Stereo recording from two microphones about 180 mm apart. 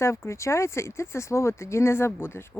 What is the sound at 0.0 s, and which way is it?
Speech, 15° left (ahead or behind).